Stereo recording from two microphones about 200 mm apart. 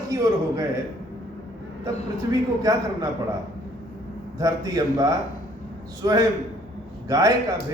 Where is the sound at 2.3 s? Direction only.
20° right (ahead or behind).